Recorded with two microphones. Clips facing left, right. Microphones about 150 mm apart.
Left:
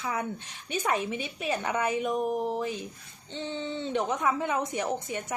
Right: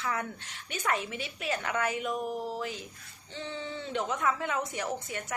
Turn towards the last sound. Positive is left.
turn(degrees=20)  # may be behind; listen again after turning